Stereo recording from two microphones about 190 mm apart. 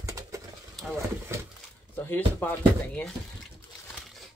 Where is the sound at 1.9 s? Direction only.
10° left (ahead or behind).